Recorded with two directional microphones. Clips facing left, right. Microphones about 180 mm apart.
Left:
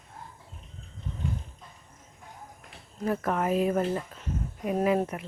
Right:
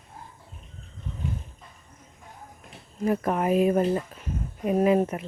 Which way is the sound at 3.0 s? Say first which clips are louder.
Right 3 dB; 15° right (ahead or behind).